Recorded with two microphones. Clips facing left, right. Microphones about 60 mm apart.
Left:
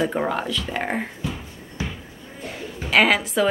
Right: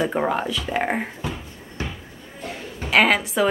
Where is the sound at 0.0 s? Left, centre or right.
Centre.